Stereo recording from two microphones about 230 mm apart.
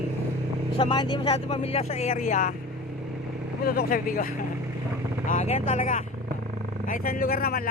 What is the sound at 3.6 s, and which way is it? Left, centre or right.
Speech, left.